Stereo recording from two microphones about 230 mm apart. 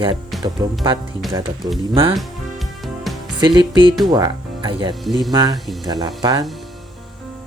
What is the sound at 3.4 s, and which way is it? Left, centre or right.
Speech, centre.